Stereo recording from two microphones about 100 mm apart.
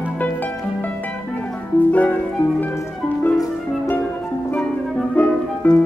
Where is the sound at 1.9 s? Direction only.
15° left (ahead or behind).